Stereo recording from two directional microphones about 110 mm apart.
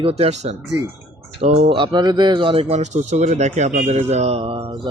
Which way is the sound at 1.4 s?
70° right (ahead or behind).